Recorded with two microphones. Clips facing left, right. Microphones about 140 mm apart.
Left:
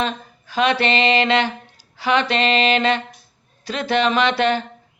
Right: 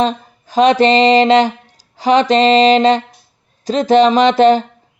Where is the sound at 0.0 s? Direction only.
40° right (ahead or behind).